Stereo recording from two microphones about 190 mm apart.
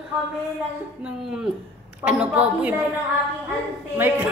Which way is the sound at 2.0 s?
5° right (ahead or behind).